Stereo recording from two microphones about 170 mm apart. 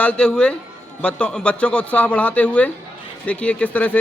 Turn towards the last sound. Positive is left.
turn(degrees=10)  # may be behind; listen again after turning